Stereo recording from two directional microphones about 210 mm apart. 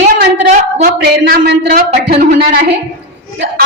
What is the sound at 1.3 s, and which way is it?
A man's voice, 45° right (ahead or behind).